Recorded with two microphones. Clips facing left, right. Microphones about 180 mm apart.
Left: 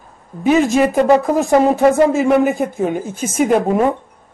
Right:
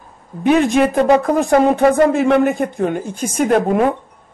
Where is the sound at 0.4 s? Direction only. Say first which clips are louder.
Even; centre (ahead or behind).